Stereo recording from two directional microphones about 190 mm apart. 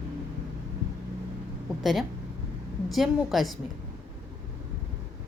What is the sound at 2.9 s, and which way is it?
Speech, centre (ahead or behind).